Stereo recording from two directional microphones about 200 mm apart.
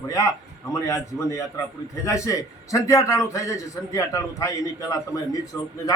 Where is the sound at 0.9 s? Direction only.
15° left (ahead or behind).